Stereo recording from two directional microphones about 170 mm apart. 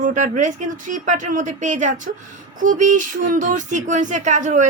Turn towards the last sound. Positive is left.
turn(degrees=-45)  # may be behind; listen again after turning